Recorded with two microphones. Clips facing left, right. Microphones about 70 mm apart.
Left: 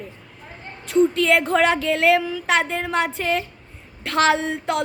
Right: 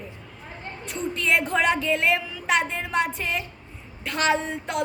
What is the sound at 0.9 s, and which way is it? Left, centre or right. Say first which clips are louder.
A woman's voice: left 8 dB; left.